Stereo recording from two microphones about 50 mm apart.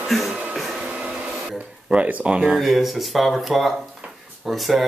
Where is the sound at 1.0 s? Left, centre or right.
Centre.